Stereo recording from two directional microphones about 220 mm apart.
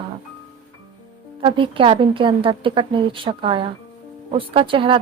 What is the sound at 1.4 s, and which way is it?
Speech, 20° right (ahead or behind).